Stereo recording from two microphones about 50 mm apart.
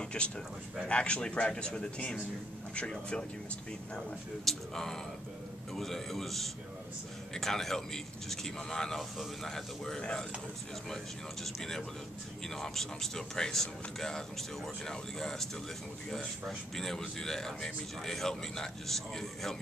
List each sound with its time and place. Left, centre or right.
0.0 s a sound: centre
0.8 s speech: left
4.5 s a man's voice: centre
11.4 s speech: centre